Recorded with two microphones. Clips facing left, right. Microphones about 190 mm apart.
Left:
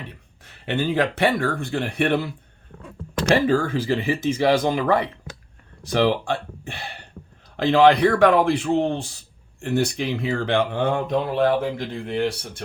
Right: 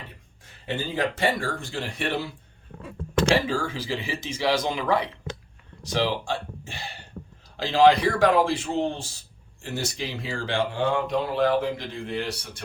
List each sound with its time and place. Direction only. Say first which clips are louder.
0.4 s speech: left 7 dB; 70° left (ahead or behind)
3.4 s speech: left 8 dB; 55° left (ahead or behind)